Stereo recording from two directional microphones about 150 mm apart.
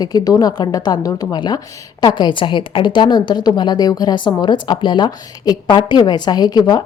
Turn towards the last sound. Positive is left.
turn(degrees=25)  # may be behind; listen again after turning